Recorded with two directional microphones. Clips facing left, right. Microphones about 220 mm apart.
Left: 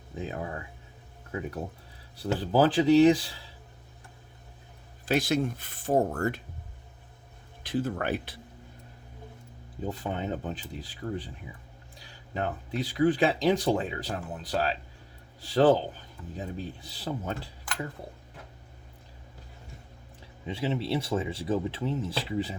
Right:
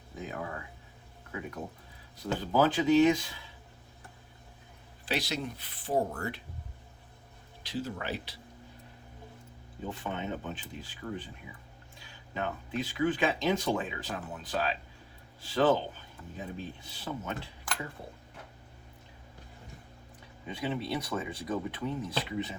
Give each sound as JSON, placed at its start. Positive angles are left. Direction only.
{"t": 0.2, "sound": "speech", "side_deg": 30}
{"t": 2.1, "sound": "speech", "side_deg": 35}
{"t": 5.0, "sound": "speech", "side_deg": 50}
{"t": 7.6, "sound": "speech", "side_deg": 55}
{"t": 9.8, "sound": "speech", "side_deg": 40}
{"t": 20.5, "sound": "speech", "side_deg": 25}